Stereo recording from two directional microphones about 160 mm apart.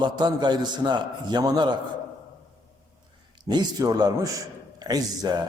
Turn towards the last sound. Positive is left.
turn(degrees=-25)  # may be behind; listen again after turning